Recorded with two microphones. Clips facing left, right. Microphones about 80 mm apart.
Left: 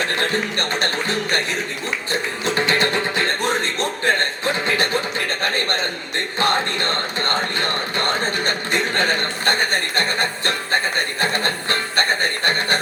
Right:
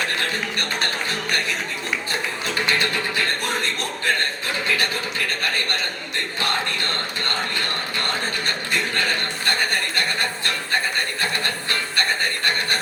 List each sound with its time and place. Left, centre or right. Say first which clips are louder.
0.2 s speech: left 4 dB; left
2.4 s music: left 4 dB; left